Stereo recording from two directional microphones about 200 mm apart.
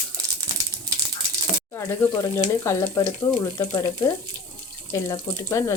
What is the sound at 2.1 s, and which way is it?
Speech, 15° left (ahead or behind).